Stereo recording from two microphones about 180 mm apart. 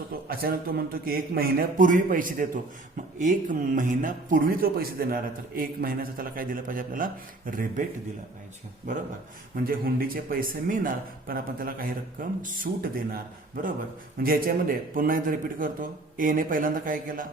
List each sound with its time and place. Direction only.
0.1 s speech: 55° right (ahead or behind)
9.6 s speech: 55° right (ahead or behind)
14.2 s speech: 55° right (ahead or behind)